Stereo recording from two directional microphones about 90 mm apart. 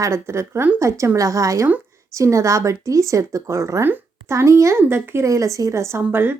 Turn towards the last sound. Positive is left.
turn(degrees=-25)  # may be behind; listen again after turning